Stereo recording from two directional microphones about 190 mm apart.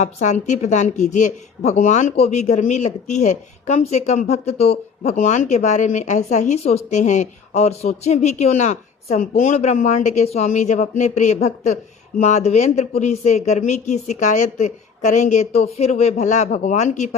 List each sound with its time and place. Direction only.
0.0 s speech: 40° left (ahead or behind)